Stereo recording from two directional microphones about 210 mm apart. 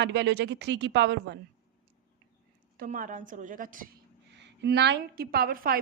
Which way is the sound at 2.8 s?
40° right (ahead or behind).